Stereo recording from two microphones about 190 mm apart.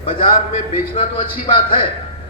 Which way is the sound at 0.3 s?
40° left (ahead or behind).